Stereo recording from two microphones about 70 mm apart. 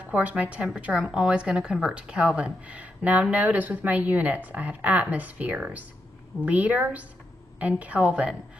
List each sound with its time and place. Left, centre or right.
0.0 s speech: right